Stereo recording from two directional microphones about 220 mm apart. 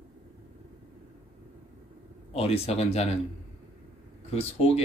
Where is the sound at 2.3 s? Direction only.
25° left (ahead or behind).